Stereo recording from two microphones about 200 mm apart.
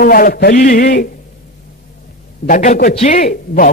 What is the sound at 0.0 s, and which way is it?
A man's voice, 45° left (ahead or behind).